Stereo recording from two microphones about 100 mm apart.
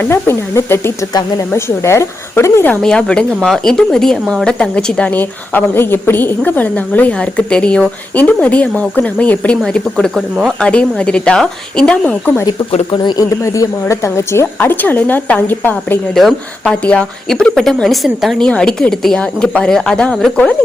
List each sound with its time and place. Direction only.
0.0 s a woman's voice: 25° left (ahead or behind)
2.8 s a woman's voice: 10° left (ahead or behind)
10.6 s a woman's voice: 10° left (ahead or behind)
12.9 s a man's voice: 45° left (ahead or behind)
13.4 s a woman's voice: 30° left (ahead or behind)
16.1 s a woman's voice: 5° left (ahead or behind)